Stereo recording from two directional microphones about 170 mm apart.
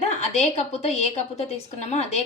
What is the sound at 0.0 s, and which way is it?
A woman's voice, 40° left (ahead or behind).